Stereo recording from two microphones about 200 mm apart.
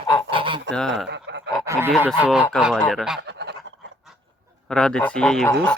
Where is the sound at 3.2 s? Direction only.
55° right (ahead or behind).